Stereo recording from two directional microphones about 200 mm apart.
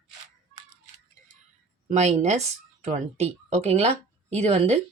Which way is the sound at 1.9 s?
35° right (ahead or behind).